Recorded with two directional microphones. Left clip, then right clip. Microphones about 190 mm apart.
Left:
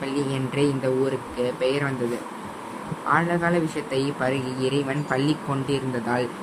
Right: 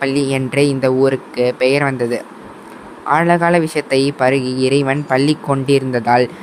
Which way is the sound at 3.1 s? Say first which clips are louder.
Right 9 dB; 50° right (ahead or behind).